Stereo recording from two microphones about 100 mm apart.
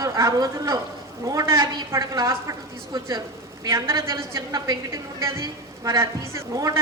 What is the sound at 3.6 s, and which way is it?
A woman's voice, 35° right (ahead or behind).